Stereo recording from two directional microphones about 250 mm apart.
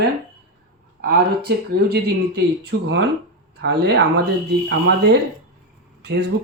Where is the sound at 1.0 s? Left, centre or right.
Right.